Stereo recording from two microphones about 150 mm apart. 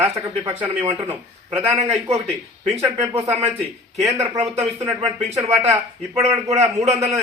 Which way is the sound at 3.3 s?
45° right (ahead or behind).